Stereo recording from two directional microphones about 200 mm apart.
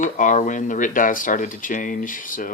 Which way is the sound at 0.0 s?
40° left (ahead or behind).